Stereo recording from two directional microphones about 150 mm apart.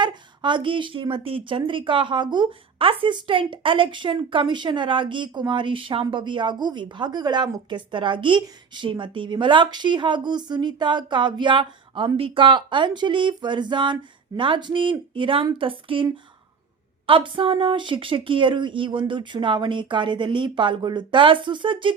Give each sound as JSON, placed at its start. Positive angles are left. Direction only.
{"t": 0.0, "sound": "speech", "side_deg": -30}
{"t": 17.1, "sound": "speech", "side_deg": -35}